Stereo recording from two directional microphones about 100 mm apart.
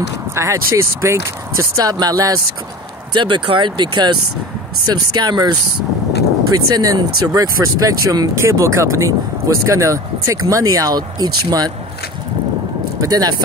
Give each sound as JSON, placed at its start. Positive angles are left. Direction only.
{"t": 0.3, "sound": "speech", "side_deg": -30}
{"t": 3.2, "sound": "speech", "side_deg": -55}
{"t": 8.4, "sound": "speech", "side_deg": -30}
{"t": 13.0, "sound": "speech", "side_deg": -40}